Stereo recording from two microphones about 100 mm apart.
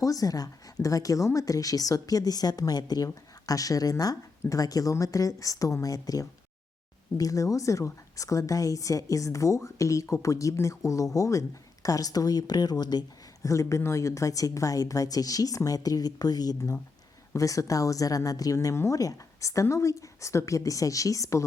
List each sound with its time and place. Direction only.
0.0 s a woman's voice: 35° left (ahead or behind)